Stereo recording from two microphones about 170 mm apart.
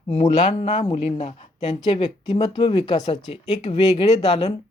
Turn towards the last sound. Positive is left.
turn(degrees=35)  # may be behind; listen again after turning